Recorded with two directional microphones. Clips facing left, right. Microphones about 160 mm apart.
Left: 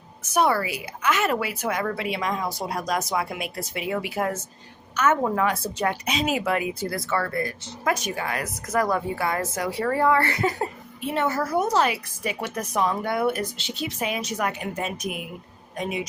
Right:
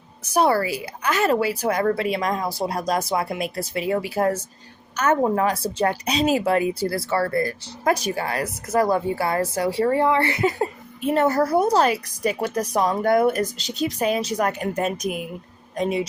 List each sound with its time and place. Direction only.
0.2 s a woman's voice: 35° right (ahead or behind)
11.0 s a woman's voice: 40° right (ahead or behind)